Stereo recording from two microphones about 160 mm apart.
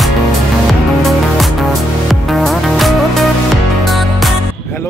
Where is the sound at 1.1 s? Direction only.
Centre (ahead or behind).